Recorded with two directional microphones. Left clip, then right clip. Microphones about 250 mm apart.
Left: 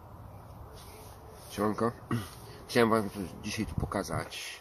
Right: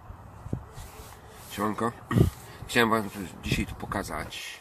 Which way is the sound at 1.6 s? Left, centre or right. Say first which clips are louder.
Right 1 dB; centre.